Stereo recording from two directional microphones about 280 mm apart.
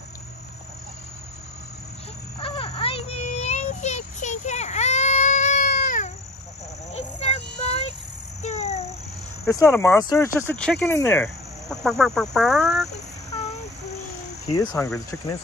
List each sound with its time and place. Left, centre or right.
2.4 s child singing: centre
6.9 s a sound: left
9.5 s speech: centre
14.5 s speech: centre